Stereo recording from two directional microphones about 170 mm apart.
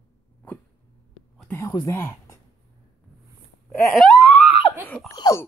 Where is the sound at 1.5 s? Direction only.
20° left (ahead or behind).